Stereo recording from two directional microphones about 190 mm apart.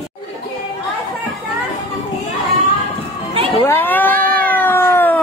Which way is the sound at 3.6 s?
10° left (ahead or behind).